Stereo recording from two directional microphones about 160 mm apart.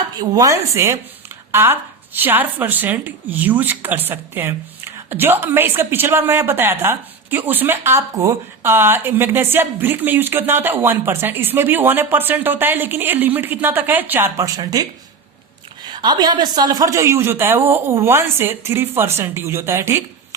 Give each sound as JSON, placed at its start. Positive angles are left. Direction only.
{"t": 0.2, "sound": "a woman's voice", "side_deg": -20}
{"t": 15.9, "sound": "a woman's voice", "side_deg": -25}